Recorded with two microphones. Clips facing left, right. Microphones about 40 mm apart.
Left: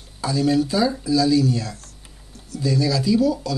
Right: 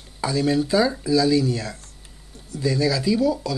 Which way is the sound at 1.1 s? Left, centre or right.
Right.